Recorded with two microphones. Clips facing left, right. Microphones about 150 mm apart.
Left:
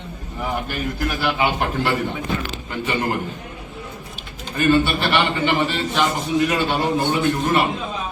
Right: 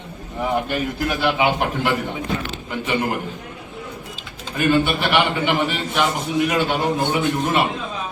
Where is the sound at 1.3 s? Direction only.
15° right (ahead or behind).